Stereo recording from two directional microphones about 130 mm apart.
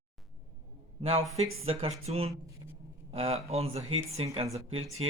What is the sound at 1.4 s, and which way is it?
Speech, 50° right (ahead or behind).